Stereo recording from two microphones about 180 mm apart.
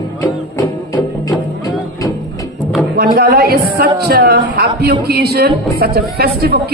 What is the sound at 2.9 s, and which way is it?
Music, 55° right (ahead or behind).